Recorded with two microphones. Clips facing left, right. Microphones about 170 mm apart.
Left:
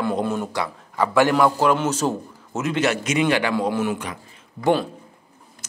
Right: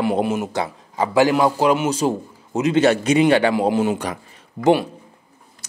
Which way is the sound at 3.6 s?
20° right (ahead or behind).